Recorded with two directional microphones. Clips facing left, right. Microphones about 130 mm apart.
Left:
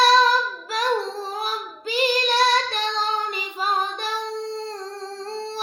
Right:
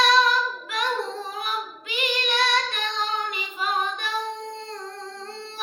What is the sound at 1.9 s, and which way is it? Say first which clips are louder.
Child singing: left 5 dB; 35° left (ahead or behind).